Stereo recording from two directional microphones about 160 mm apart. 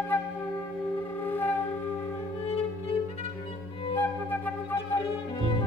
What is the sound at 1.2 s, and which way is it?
Music, 10° left (ahead or behind).